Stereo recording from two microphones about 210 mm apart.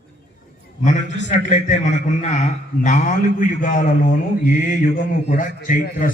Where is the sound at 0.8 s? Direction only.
35° left (ahead or behind).